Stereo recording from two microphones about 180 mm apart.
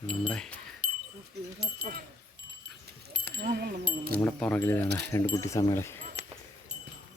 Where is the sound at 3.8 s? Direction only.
55° right (ahead or behind).